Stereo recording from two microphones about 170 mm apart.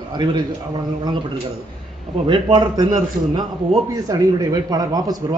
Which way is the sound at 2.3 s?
30° right (ahead or behind).